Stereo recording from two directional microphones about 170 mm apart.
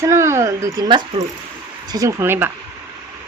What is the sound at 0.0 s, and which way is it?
Speech, 15° right (ahead or behind).